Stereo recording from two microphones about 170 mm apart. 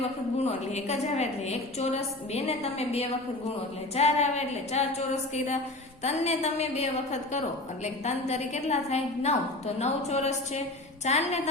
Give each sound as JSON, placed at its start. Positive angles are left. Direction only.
{"t": 0.4, "sound": "a woman's voice", "side_deg": 40}